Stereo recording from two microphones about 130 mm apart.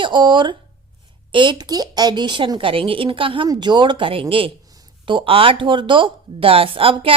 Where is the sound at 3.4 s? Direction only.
30° right (ahead or behind).